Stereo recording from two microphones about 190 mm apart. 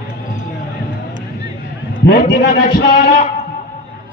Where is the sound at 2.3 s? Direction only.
55° left (ahead or behind).